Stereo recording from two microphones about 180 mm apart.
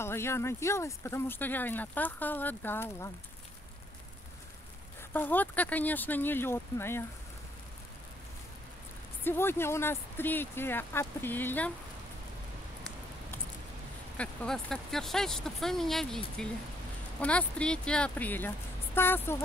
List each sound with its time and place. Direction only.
0.0 s speech: 15° left (ahead or behind)
5.1 s speech: 10° left (ahead or behind)
9.2 s speech: 10° left (ahead or behind)
14.1 s speech: 5° left (ahead or behind)